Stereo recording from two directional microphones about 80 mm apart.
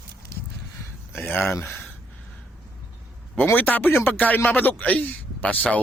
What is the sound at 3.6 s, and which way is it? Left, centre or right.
Speech, left.